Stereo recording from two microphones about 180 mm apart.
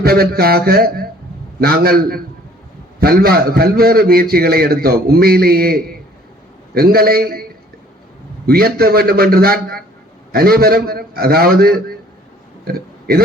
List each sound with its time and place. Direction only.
0.0 s a man's voice: 60° right (ahead or behind)
8.4 s a man's voice: 55° right (ahead or behind)
12.6 s burping: 55° right (ahead or behind)